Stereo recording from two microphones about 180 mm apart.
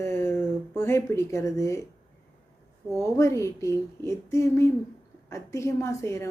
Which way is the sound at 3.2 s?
15° left (ahead or behind).